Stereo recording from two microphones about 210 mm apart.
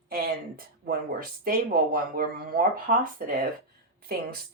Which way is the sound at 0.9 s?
45° right (ahead or behind).